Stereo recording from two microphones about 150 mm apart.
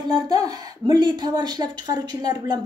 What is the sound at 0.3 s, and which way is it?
Speech, 25° right (ahead or behind).